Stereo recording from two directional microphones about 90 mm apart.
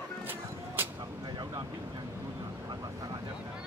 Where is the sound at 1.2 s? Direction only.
55° right (ahead or behind).